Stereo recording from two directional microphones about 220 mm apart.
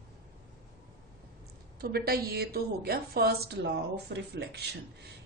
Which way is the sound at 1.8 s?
45° right (ahead or behind).